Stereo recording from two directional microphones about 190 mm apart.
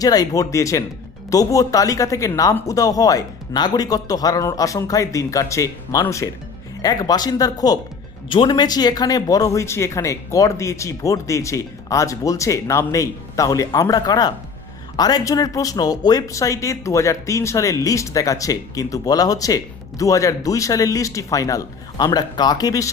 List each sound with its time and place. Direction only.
0.0 s speech: 20° left (ahead or behind)